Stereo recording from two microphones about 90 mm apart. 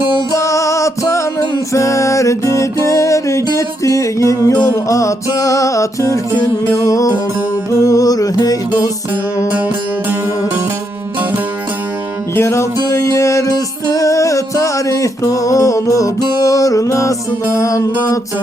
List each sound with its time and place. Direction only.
0.3 s music: 35° left (ahead or behind)
9.5 s music: 15° right (ahead or behind)
12.3 s music: 30° left (ahead or behind)